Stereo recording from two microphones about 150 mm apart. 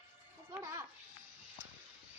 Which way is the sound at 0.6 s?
20° right (ahead or behind).